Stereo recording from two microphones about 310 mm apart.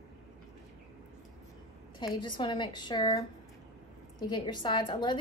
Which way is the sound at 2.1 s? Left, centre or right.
Centre.